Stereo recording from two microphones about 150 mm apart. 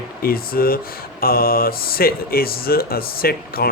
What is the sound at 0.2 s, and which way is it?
Speech, 80° left.